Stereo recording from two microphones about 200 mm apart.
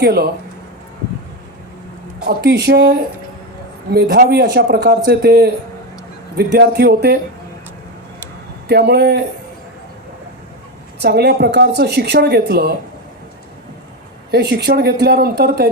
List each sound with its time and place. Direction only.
0.0 s speech: 50° right (ahead or behind)
2.2 s speech: 55° right (ahead or behind)
8.6 s speech: 55° right (ahead or behind)
11.0 s speech: 55° right (ahead or behind)
14.3 s speech: 55° right (ahead or behind)